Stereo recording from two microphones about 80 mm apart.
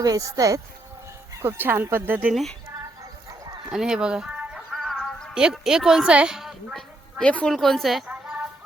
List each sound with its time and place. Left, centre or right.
0.0 s speech: right
1.3 s speech: right
2.3 s a woman's voice: centre
3.7 s speech: centre
4.7 s music: centre
5.3 s speech: centre
7.2 s a woman's voice: centre